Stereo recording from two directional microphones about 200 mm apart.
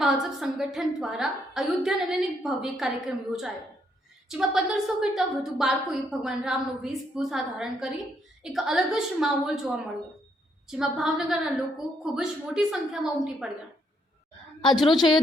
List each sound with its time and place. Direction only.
0.0 s a woman's voice: centre (ahead or behind)